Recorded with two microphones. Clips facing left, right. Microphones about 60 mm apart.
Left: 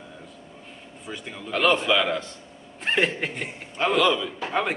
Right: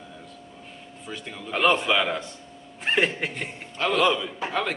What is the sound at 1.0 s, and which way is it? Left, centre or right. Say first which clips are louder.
Speech: left 1 dB; centre.